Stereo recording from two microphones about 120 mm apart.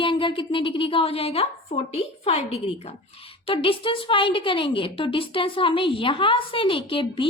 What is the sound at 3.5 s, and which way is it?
Speech, 50° left (ahead or behind).